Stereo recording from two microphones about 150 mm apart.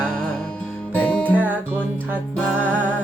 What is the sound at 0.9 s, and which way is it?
Music, 10° left (ahead or behind).